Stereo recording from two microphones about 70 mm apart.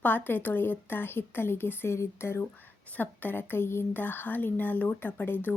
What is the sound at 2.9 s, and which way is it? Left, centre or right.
A woman's voice, left.